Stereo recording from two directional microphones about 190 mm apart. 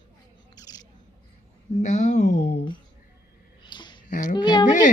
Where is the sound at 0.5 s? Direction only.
20° left (ahead or behind).